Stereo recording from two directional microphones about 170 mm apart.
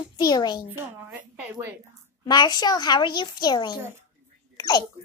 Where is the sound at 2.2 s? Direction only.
25° left (ahead or behind).